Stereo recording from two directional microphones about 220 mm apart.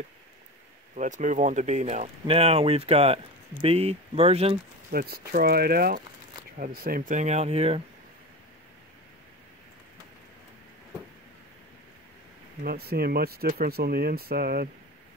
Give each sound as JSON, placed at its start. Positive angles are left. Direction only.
{"t": 0.9, "sound": "speech", "side_deg": -35}
{"t": 4.9, "sound": "speech", "side_deg": -45}
{"t": 12.6, "sound": "speech", "side_deg": -45}